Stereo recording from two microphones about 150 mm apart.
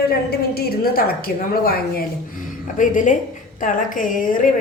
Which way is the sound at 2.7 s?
60° left (ahead or behind).